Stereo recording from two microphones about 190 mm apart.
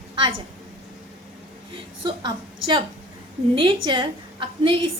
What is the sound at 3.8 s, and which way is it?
Speech, 25° right (ahead or behind).